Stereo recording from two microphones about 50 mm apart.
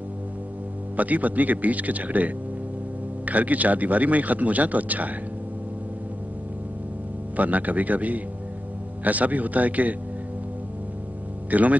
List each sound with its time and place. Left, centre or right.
0.9 s speech: right
7.3 s speech: right
11.5 s speech: right